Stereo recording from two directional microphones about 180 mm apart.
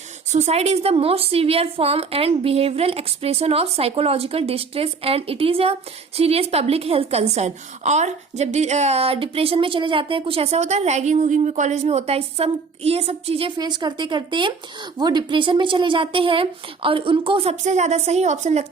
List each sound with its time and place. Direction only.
0.3 s a woman's voice: 40° right (ahead or behind)